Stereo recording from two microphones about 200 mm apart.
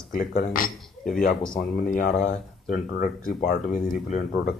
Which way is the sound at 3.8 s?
40° left (ahead or behind).